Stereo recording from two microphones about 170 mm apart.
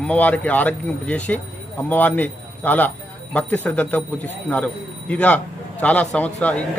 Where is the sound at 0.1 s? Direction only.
10° left (ahead or behind).